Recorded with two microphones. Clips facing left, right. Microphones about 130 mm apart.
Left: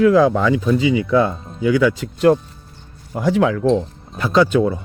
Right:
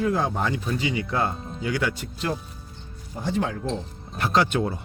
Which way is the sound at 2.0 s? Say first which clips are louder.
Left 15 dB; 60° left (ahead or behind).